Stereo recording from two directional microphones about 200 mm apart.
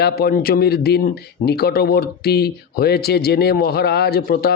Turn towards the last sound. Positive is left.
turn(degrees=50)  # may be behind; listen again after turning